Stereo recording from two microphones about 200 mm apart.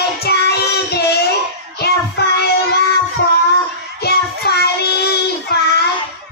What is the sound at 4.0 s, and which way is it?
Child singing, 55° left (ahead or behind).